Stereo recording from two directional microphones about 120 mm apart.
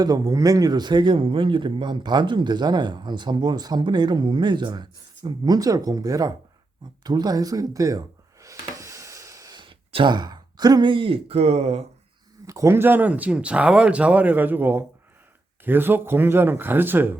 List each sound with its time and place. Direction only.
0.0 s a man's voice: 30° right (ahead or behind)
7.0 s a sound: 35° right (ahead or behind)
9.6 s speech: 45° right (ahead or behind); by 11.8 s 60° right (ahead or behind)
12.5 s speech: 25° right (ahead or behind)